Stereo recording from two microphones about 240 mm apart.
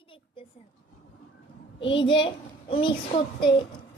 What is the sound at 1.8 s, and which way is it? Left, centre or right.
A child's voice, left.